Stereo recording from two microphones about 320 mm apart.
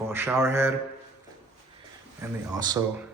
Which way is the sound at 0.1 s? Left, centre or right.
Centre.